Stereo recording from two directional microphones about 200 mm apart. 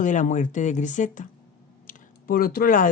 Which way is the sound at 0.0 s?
40° left (ahead or behind).